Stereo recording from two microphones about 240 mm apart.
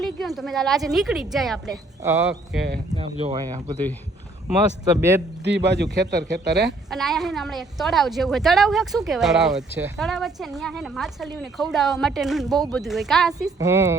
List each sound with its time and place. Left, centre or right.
0.0 s speech: centre
2.9 s speech: right
4.9 s speech: centre
5.4 s speech: right
6.7 s speech: centre
13.6 s speech: centre